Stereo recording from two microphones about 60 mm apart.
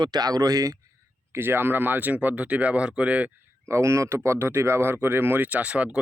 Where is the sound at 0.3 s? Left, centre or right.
Right.